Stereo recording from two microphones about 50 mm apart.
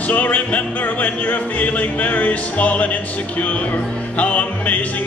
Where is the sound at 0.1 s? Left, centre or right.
Left.